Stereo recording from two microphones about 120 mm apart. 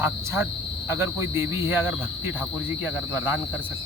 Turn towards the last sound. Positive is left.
turn(degrees=-15)  # may be behind; listen again after turning